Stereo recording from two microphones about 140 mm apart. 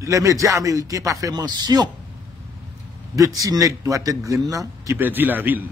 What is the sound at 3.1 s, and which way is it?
A man's voice, 25° right (ahead or behind).